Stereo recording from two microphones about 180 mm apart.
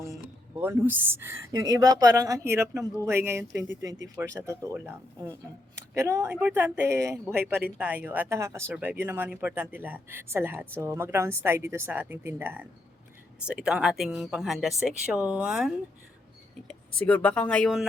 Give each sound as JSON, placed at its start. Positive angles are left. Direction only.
{"t": 0.5, "sound": "speech", "side_deg": -15}